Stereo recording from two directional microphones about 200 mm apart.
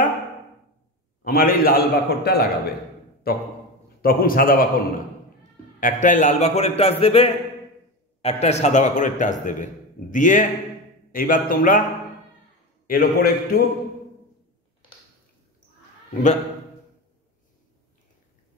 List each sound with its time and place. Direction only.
1.2 s a man's voice: 50° left (ahead or behind)
12.8 s a man's voice: 50° left (ahead or behind)
16.1 s a man's voice: 40° left (ahead or behind)